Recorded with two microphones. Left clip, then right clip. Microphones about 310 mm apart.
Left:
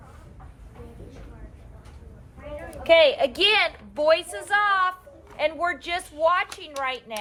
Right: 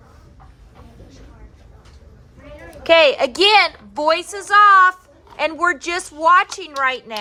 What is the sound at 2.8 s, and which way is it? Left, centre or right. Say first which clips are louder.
A woman's voice: right 4 dB; right.